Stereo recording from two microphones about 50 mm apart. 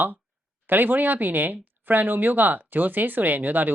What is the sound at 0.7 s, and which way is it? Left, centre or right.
Speech, right.